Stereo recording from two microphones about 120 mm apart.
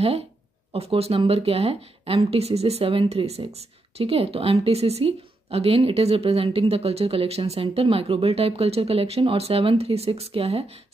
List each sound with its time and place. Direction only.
0.7 s speech: 55° right (ahead or behind)